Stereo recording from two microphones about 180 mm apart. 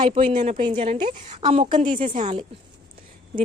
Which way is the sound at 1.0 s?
50° right (ahead or behind).